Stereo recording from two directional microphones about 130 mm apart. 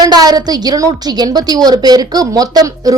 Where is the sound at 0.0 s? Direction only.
30° right (ahead or behind).